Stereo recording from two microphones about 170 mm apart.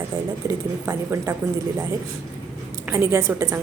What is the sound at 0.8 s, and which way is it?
Speech, 15° right (ahead or behind).